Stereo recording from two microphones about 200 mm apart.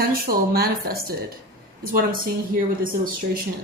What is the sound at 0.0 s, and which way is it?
Speech, 50° right (ahead or behind).